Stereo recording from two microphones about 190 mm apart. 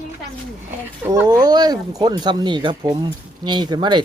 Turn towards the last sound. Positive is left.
turn(degrees=-25)  # may be behind; listen again after turning